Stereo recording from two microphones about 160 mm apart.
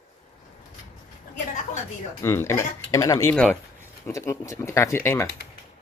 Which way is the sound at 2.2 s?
15° left (ahead or behind).